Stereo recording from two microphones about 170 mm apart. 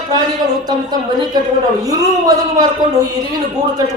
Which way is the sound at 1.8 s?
20° right (ahead or behind).